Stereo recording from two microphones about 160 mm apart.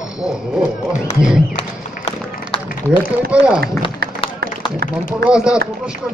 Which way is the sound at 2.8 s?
10° left (ahead or behind).